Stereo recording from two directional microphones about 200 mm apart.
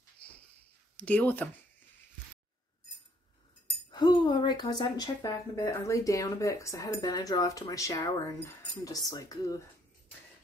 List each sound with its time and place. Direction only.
0.9 s speech: 5° left (ahead or behind)
3.9 s speech: 20° left (ahead or behind)